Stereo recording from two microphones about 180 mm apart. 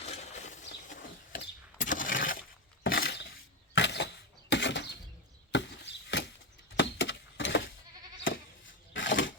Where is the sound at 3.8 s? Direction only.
75° left (ahead or behind).